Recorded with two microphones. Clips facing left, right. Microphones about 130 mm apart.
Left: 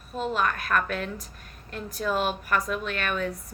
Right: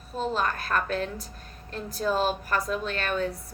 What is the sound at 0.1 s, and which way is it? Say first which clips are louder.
Speech: left 1 dB; 30° right (ahead or behind).